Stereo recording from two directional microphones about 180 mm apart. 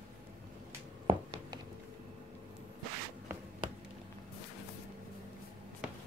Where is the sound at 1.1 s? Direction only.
30° right (ahead or behind).